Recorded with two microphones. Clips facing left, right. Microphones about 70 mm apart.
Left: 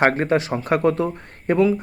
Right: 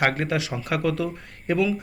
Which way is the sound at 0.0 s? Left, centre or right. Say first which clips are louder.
Left 6 dB; left.